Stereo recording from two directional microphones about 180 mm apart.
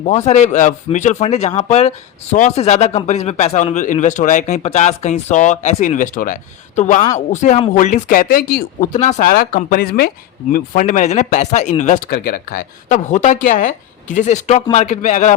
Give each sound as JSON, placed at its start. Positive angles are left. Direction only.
{"t": 0.0, "sound": "a man's voice", "side_deg": 35}